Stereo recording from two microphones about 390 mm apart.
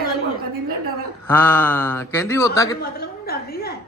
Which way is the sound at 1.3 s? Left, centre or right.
Centre.